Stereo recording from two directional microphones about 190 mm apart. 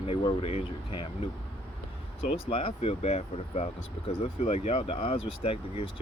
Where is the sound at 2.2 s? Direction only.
30° left (ahead or behind).